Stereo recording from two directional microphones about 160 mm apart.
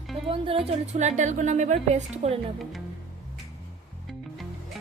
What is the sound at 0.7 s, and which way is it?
A woman's voice, 45° right (ahead or behind).